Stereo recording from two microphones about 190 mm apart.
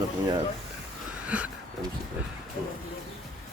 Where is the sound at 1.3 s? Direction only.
5° right (ahead or behind).